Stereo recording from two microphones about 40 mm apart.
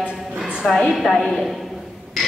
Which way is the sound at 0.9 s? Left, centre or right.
Centre.